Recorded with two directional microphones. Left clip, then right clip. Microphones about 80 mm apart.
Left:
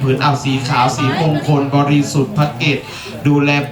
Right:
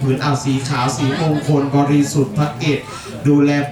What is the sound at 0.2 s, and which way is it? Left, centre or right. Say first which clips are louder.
Speech: left 4 dB; left.